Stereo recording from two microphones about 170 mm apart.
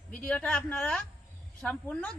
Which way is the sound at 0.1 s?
10° left (ahead or behind).